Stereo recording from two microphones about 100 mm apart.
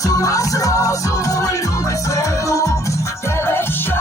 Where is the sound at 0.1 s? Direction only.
35° left (ahead or behind).